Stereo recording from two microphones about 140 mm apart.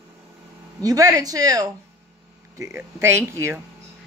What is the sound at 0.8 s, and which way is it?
A woman's voice, 25° right (ahead or behind).